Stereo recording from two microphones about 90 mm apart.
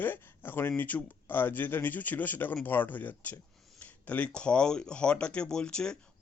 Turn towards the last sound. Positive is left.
turn(degrees=10)  # may be behind; listen again after turning